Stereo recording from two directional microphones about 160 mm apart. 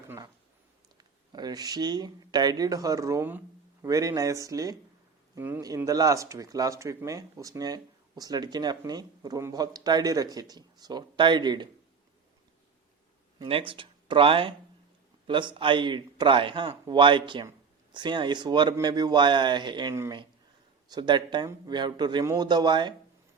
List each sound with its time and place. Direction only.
0.9 s speech: 25° right (ahead or behind)
13.5 s a man's voice: 30° right (ahead or behind)